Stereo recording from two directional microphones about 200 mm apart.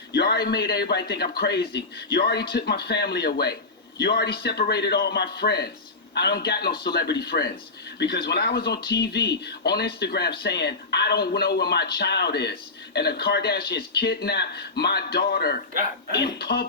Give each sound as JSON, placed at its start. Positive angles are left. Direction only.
{"t": 0.1, "sound": "speech", "side_deg": 55}